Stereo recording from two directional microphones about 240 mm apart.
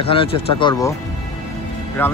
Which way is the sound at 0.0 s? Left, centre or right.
Left.